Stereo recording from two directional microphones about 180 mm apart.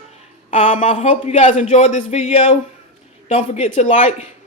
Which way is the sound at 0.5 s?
40° left (ahead or behind).